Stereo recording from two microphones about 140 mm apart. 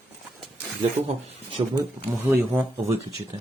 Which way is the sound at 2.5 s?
10° right (ahead or behind).